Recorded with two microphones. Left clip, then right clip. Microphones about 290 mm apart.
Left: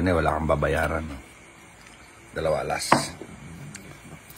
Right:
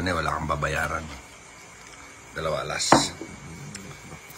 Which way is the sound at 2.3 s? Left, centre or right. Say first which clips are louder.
Left 3 dB; centre.